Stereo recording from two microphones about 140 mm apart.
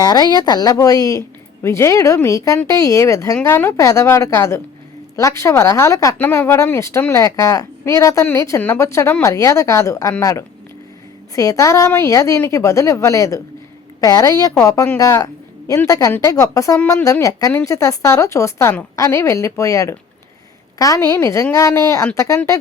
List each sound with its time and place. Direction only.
0.0 s speech: 30° left (ahead or behind)